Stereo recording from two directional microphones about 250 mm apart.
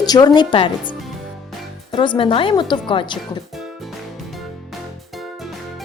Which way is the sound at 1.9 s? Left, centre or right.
Centre.